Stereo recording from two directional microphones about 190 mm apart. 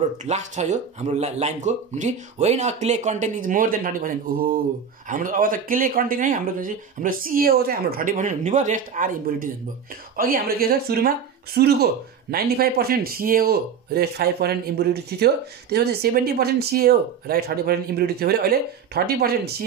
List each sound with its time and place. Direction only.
0.2 s speech: 40° right (ahead or behind); by 19.5 s 55° right (ahead or behind)